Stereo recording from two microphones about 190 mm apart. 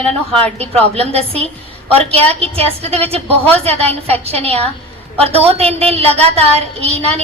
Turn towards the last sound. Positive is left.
turn(degrees=-30)  # may be behind; listen again after turning